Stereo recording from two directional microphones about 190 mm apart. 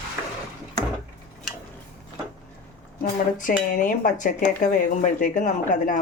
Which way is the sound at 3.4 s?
45° left (ahead or behind).